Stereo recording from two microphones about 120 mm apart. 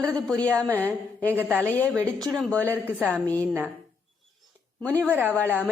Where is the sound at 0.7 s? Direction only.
15° right (ahead or behind).